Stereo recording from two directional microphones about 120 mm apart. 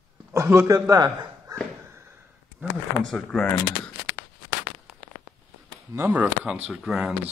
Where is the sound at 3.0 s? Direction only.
5° left (ahead or behind).